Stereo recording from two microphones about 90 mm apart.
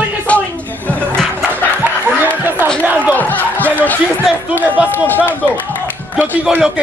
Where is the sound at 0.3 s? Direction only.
15° left (ahead or behind).